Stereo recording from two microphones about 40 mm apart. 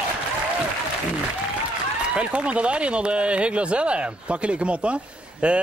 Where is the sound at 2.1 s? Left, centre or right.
Right.